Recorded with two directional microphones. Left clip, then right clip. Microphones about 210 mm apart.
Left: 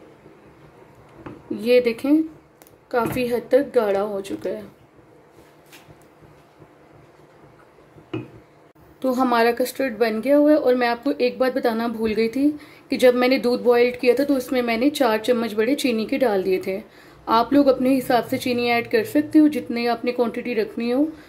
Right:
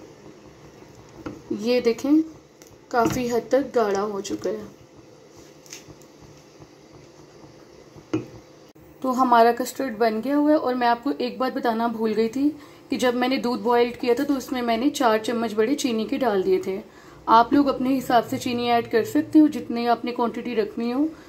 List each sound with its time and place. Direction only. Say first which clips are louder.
1.8 s a woman's voice: left 2 dB; 10° left (ahead or behind)
9.0 s speech: right 2 dB; 25° left (ahead or behind)